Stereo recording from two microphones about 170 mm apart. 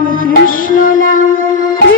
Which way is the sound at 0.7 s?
55° left (ahead or behind).